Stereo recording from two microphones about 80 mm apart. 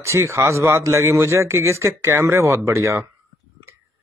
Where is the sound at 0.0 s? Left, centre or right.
Right.